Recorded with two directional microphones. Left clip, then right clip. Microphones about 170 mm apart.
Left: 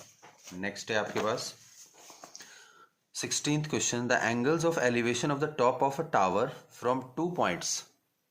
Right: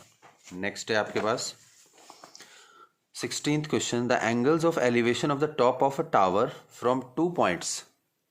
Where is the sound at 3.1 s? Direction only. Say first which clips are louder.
Right 2 dB; 35° right (ahead or behind).